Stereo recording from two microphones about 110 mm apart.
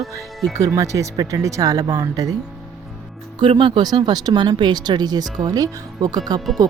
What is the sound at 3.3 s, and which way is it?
Speech, 50° right (ahead or behind).